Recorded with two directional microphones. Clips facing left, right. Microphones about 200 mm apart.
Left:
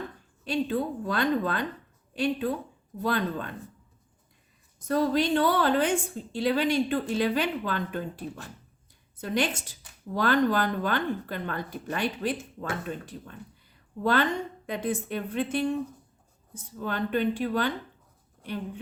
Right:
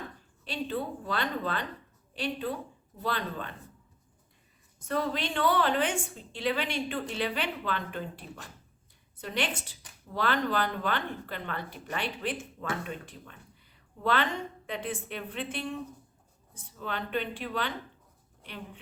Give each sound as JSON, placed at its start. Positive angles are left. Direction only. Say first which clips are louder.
{"t": 0.4, "sound": "speech", "louder": "left 6 dB", "side_deg": 45}
{"t": 4.8, "sound": "a woman's voice", "louder": "left 6 dB", "side_deg": 40}
{"t": 9.2, "sound": "speech", "louder": "left 5 dB", "side_deg": 45}
{"t": 14.0, "sound": "a woman's voice", "louder": "left 4 dB", "side_deg": 40}
{"t": 16.8, "sound": "speech", "louder": "left 6 dB", "side_deg": 45}